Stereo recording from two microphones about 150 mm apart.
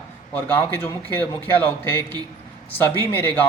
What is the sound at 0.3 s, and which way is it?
A man's voice, 15° left (ahead or behind).